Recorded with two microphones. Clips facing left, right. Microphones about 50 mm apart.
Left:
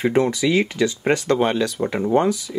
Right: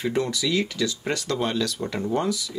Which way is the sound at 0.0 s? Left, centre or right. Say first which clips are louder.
Left 7 dB; left.